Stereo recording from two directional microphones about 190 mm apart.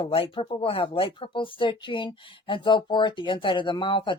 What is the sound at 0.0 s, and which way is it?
Speech, 30° left (ahead or behind).